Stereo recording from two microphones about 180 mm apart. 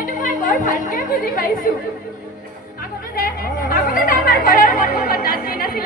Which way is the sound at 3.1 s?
50° left (ahead or behind).